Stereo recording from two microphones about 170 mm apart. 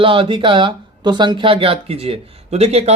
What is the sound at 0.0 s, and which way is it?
Speech, 30° right (ahead or behind).